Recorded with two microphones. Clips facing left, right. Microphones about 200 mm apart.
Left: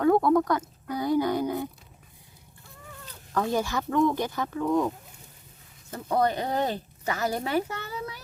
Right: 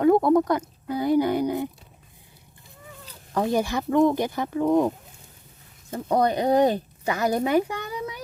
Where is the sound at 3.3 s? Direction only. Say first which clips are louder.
Right 3 dB; 15° right (ahead or behind).